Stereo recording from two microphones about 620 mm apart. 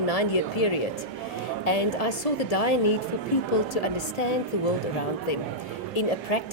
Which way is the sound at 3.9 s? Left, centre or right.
Left.